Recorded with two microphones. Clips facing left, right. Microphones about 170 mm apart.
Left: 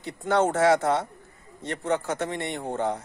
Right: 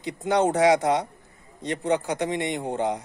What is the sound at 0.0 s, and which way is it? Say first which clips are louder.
Speech: right 1 dB; 15° right (ahead or behind).